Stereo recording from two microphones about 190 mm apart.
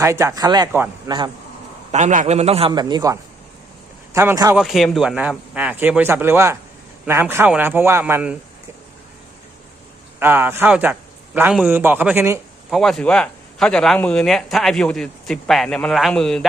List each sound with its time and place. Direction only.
0.0 s speech: 15° right (ahead or behind)
0.7 s speech: 10° right (ahead or behind)
1.9 s a man's voice: 40° right (ahead or behind); by 4.5 s 15° right (ahead or behind)
4.5 s speech: centre (ahead or behind)
10.2 s speech: 10° right (ahead or behind)
12.7 s a man's voice: centre (ahead or behind)